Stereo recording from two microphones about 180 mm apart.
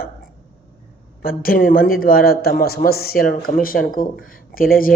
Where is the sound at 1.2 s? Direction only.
55° left (ahead or behind).